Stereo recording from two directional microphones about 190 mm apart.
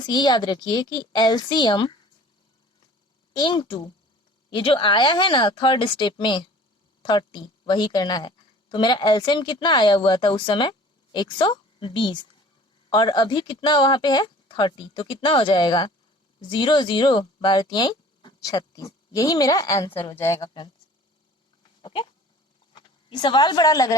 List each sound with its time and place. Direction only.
0.0 s speech: 20° left (ahead or behind)
3.3 s a woman's voice: 25° left (ahead or behind)
19.9 s speech: 30° left (ahead or behind)
20.1 s speech: 15° left (ahead or behind)
21.8 s a sound: 25° left (ahead or behind)
22.7 s speech: 25° left (ahead or behind)